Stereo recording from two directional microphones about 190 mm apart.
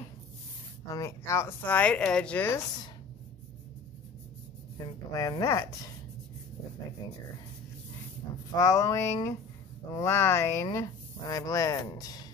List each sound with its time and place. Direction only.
0.8 s speech: 15° left (ahead or behind)
4.7 s speech: 20° left (ahead or behind)
8.5 s speech: 20° left (ahead or behind)